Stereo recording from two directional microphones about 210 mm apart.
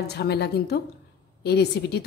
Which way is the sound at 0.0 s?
50° left (ahead or behind).